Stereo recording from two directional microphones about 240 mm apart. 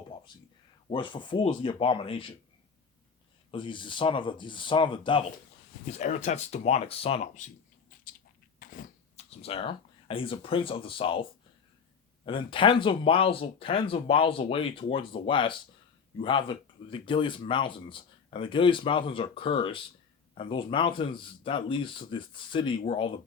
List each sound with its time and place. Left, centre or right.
0.9 s speech: centre
3.5 s speech: left